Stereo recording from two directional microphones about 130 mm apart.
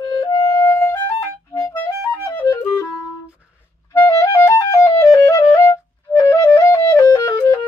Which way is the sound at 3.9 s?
20° left (ahead or behind).